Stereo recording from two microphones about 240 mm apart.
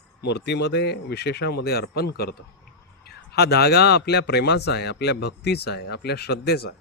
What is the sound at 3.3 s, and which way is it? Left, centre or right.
A man's voice, left.